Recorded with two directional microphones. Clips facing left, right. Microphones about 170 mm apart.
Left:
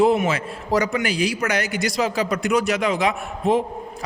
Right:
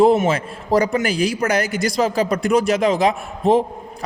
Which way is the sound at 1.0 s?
45° right (ahead or behind).